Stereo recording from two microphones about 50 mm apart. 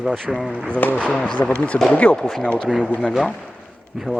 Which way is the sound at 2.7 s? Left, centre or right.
Centre.